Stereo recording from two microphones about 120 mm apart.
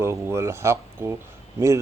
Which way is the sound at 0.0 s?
20° right (ahead or behind).